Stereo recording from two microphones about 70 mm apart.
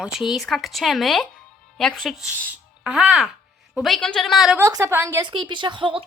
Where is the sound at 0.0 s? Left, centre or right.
Centre.